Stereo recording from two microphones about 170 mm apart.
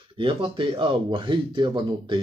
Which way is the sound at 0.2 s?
30° right (ahead or behind).